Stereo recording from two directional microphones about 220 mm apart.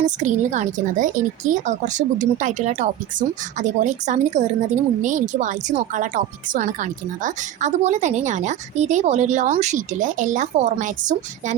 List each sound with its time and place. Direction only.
0.0 s speech: 35° right (ahead or behind)